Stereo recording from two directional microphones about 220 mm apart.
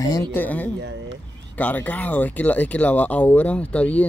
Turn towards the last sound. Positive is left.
turn(degrees=5)  # may be behind; listen again after turning